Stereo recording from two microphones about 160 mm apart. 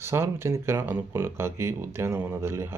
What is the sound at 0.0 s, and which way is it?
Speech, 15° right (ahead or behind).